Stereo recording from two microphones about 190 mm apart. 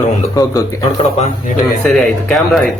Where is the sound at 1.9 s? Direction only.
Centre (ahead or behind).